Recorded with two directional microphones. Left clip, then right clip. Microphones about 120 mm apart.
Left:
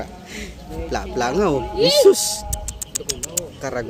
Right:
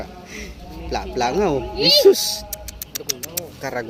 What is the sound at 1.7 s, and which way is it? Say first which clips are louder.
Speech: even; 55° left (ahead or behind).